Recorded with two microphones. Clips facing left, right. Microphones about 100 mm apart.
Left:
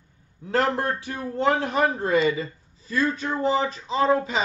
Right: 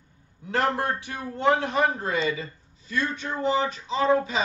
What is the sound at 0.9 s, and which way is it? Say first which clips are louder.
A man's voice: left 5 dB; 35° left (ahead or behind).